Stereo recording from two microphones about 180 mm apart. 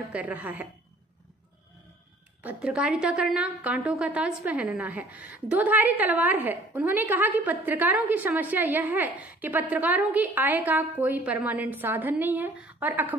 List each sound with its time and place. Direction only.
0.1 s a woman's voice: 10° right (ahead or behind)
2.4 s a woman's voice: 5° right (ahead or behind)